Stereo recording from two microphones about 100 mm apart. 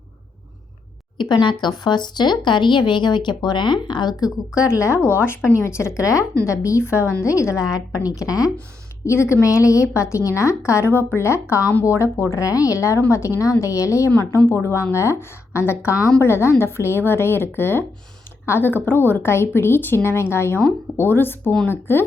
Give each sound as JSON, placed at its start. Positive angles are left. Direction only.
{"t": 1.2, "sound": "speech", "side_deg": 50}
{"t": 4.5, "sound": "a woman's voice", "side_deg": 30}